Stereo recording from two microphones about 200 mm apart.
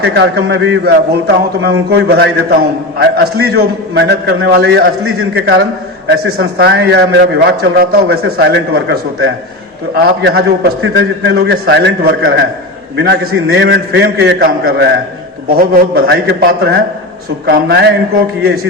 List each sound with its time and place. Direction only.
0.0 s a man's voice: 55° right (ahead or behind)
10.7 s a man's voice: 80° right; by 17.9 s 55° right (ahead or behind)